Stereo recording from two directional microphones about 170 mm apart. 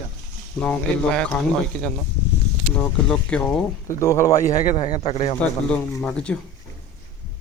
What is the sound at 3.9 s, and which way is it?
Speech, 15° left (ahead or behind).